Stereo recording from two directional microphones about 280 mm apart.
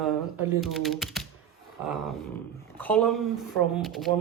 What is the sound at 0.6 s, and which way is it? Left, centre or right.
Speech, centre.